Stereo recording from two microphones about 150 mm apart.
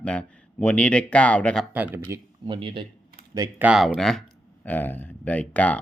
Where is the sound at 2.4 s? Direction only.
35° right (ahead or behind).